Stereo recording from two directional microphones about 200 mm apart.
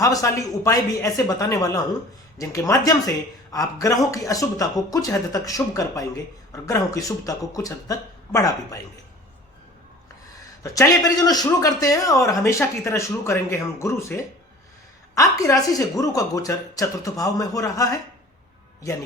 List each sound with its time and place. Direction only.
0.0 s a man's voice: 15° left (ahead or behind)
10.6 s a man's voice: 15° left (ahead or behind)